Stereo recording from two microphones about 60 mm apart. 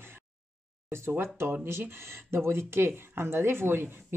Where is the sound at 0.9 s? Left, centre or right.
Right.